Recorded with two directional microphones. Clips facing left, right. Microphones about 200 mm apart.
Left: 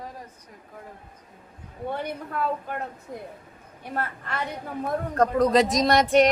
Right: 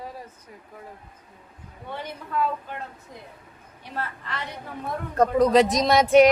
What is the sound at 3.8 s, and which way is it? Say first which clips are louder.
Speech: left 2 dB; 50° left (ahead or behind).